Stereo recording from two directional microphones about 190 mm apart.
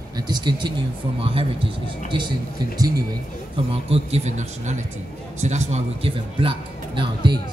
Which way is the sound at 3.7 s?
30° right (ahead or behind).